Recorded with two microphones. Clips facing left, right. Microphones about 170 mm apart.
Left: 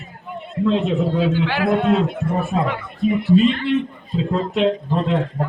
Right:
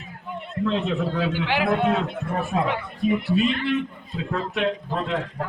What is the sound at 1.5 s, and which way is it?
Speech, 15° right (ahead or behind).